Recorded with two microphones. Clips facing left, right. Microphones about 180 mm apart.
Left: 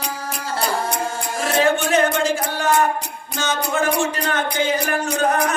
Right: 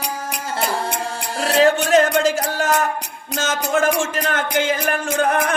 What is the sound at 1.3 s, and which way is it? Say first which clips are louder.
Music: right 3 dB; 35° right (ahead or behind).